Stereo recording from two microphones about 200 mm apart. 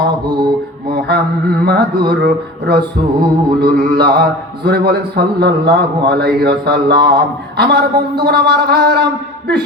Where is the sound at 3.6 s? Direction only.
55° right (ahead or behind).